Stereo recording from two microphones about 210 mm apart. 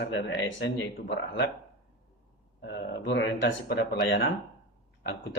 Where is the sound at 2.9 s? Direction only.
60° left (ahead or behind).